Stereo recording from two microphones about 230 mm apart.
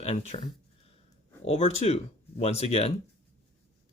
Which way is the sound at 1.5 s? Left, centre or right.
Left.